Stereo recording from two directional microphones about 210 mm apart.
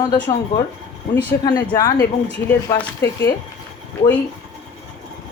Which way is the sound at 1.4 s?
20° left (ahead or behind).